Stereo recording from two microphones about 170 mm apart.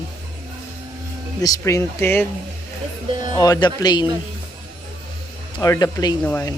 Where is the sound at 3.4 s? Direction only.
25° left (ahead or behind).